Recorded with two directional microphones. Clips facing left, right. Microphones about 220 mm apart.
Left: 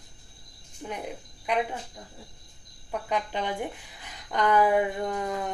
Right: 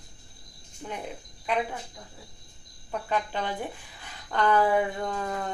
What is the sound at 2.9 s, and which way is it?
A woman's voice, 15° left (ahead or behind).